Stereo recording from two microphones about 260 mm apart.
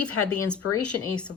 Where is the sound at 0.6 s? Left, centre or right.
Left.